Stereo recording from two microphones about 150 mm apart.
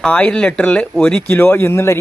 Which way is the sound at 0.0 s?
5° left (ahead or behind).